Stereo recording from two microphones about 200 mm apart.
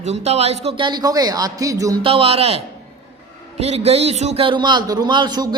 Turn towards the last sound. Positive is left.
turn(degrees=-20)  # may be behind; listen again after turning